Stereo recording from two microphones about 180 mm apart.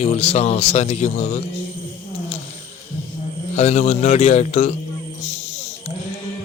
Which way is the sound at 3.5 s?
40° left (ahead or behind).